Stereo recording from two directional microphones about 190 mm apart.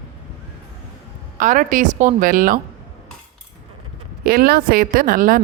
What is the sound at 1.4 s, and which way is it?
A woman's voice, 45° right (ahead or behind).